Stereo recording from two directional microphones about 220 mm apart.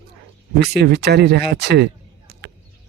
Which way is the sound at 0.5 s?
45° right (ahead or behind).